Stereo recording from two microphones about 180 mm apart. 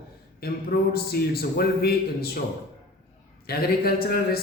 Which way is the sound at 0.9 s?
60° left (ahead or behind).